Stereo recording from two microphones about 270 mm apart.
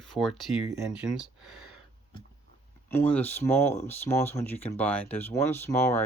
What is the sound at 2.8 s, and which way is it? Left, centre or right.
Speech, centre.